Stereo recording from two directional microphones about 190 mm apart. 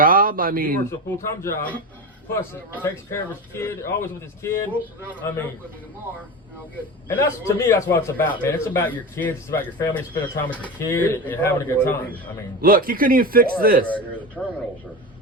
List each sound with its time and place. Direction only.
0.0 s speech: 45° right (ahead or behind)
0.9 s a man's voice: 15° left (ahead or behind)
2.8 s a man's voice: 15° left (ahead or behind)
7.4 s a man's voice: 15° left (ahead or behind)
12.6 s a man's voice: 50° right (ahead or behind)
13.8 s a man's voice: 10° left (ahead or behind)